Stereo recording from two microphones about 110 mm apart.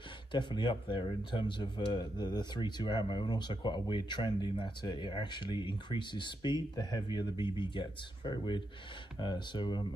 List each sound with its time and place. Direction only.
0.3 s speech: 45° left (ahead or behind)